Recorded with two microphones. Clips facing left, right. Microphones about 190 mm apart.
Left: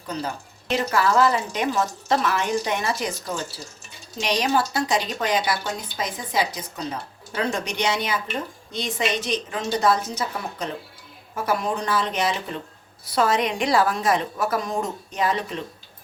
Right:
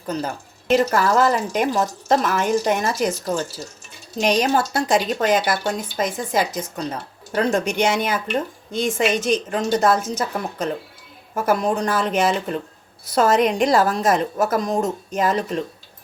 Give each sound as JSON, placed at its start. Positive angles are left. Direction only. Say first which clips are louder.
{"t": 0.7, "sound": "speech", "louder": "right 4 dB", "side_deg": -45}
{"t": 4.2, "sound": "speech", "louder": "right 4 dB", "side_deg": -45}